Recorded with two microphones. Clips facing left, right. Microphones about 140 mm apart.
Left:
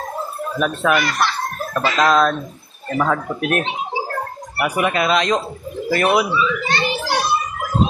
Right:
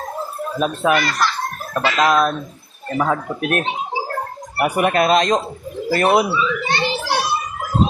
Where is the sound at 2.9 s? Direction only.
15° right (ahead or behind).